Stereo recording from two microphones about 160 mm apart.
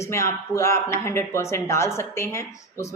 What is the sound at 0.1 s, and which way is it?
A woman's voice, 20° left (ahead or behind).